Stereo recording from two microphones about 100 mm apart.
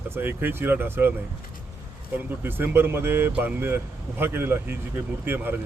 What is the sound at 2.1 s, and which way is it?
Speech, 20° right (ahead or behind).